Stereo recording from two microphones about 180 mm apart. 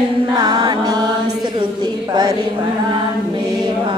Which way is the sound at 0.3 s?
25° right (ahead or behind).